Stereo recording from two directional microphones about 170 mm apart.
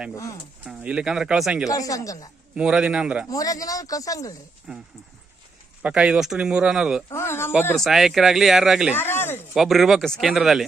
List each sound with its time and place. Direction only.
0.6 s speech: 5° right (ahead or behind)
1.7 s speech: 20° left (ahead or behind)
2.6 s speech: 5° right (ahead or behind)
3.2 s speech: 20° left (ahead or behind)
4.7 s speech: 5° right (ahead or behind)
7.1 s speech: 15° left (ahead or behind)
7.8 s speech: centre (ahead or behind)
9.0 s speech: 15° left (ahead or behind)
9.6 s speech: centre (ahead or behind)